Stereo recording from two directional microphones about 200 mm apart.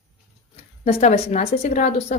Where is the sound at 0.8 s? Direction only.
35° left (ahead or behind).